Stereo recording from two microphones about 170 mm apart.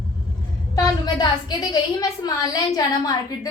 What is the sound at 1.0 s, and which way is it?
A woman's voice, 25° left (ahead or behind).